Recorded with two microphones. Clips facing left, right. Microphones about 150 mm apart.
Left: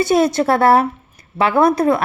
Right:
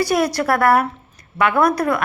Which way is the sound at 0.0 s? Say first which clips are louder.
Left 4 dB; 25° left (ahead or behind).